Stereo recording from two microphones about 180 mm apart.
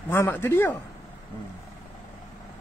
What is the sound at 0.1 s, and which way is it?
Speech, 15° left (ahead or behind).